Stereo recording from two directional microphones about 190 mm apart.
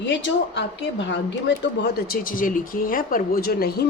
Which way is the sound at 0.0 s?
75° left (ahead or behind).